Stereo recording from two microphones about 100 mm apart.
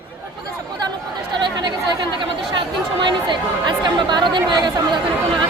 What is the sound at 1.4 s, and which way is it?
A man's voice, 50° right (ahead or behind).